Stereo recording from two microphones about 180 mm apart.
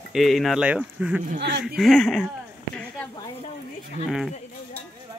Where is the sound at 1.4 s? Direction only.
70° right (ahead or behind).